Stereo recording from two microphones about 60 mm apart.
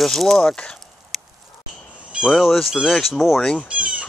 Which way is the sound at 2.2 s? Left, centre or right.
Centre.